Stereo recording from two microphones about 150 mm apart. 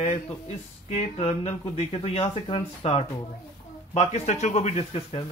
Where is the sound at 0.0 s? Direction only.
45° left (ahead or behind).